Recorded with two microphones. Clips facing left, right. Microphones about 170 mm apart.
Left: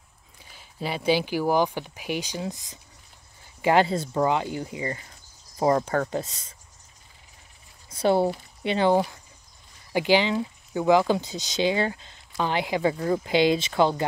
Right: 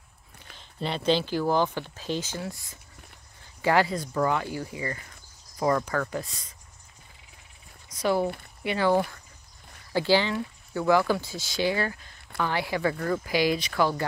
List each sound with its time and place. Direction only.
0.6 s speech: 5° left (ahead or behind); by 6.5 s 25° left (ahead or behind)
7.9 s speech: 30° left (ahead or behind)